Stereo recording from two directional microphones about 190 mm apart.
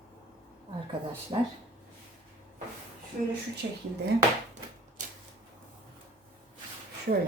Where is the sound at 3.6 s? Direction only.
65° right (ahead or behind).